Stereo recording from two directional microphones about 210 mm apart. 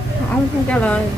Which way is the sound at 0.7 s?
5° left (ahead or behind).